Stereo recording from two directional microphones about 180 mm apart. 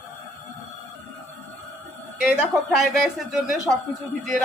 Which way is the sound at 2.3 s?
5° right (ahead or behind).